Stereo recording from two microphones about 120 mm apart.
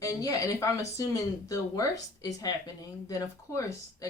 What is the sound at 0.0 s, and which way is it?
Speech, 30° left (ahead or behind).